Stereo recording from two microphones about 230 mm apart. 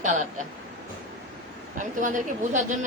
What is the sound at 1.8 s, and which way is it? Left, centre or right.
Speech, right.